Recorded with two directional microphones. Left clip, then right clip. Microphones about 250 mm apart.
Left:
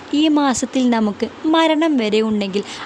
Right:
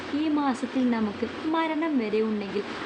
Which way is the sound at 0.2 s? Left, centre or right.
Left.